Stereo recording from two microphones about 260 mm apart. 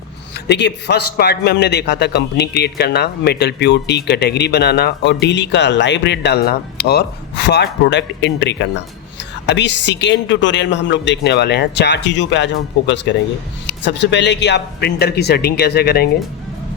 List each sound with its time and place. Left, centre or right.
0.3 s a man's voice: left